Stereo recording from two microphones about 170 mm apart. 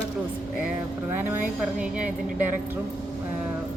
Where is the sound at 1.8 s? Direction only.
5° right (ahead or behind).